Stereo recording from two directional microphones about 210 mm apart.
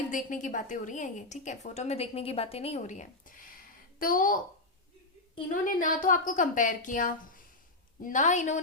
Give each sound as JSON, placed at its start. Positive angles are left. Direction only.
{"t": 0.1, "sound": "a woman's voice", "side_deg": 35}
{"t": 5.6, "sound": "a woman's voice", "side_deg": 40}